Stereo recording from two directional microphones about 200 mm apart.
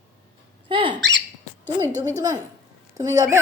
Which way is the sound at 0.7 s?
25° right (ahead or behind).